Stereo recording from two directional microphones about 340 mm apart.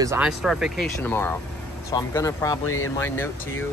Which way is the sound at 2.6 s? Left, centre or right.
Left.